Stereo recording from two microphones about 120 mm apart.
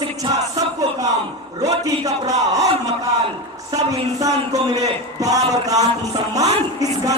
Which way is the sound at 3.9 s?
30° right (ahead or behind).